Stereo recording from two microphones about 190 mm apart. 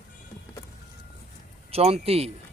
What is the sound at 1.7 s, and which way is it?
Speech, 30° right (ahead or behind).